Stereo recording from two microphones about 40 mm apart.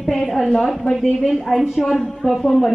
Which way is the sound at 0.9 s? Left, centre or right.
Centre.